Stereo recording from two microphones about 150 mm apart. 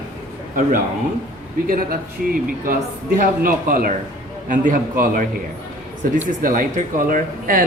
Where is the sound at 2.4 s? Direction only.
70° right (ahead or behind).